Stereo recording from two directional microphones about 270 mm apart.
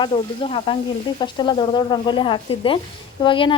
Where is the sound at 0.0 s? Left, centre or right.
Centre.